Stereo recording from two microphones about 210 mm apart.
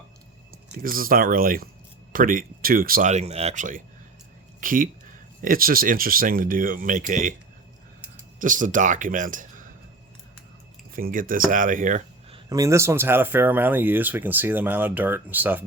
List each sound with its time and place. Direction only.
0.7 s speech: 45° right (ahead or behind)
8.4 s speech: 40° right (ahead or behind)
10.9 s speech: 40° right (ahead or behind)
12.5 s speech: 15° right (ahead or behind)